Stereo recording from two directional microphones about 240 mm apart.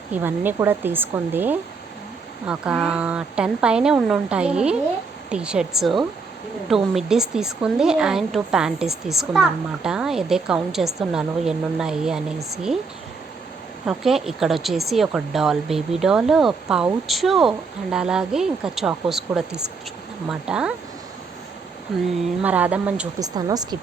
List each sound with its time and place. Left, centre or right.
0.1 s a woman's voice: centre
13.8 s a woman's voice: centre
22.0 s a woman's voice: centre
23.3 s speech: centre